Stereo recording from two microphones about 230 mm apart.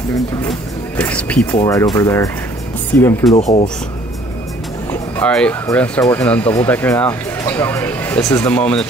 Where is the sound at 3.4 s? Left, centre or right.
Left.